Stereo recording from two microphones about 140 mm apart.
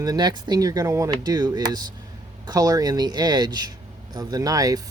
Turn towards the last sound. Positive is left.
turn(degrees=-25)  # may be behind; listen again after turning